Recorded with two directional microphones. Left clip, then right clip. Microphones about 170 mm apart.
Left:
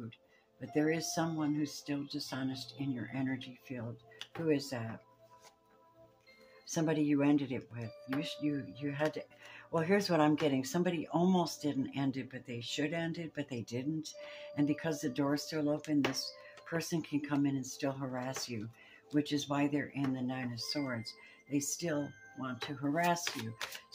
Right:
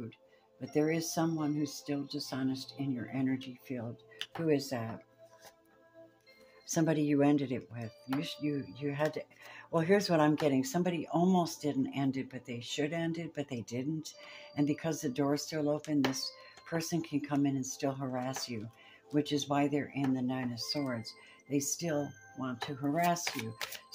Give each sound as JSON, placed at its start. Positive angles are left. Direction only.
{"t": 0.6, "sound": "speech", "side_deg": -20}
{"t": 6.7, "sound": "speech", "side_deg": -30}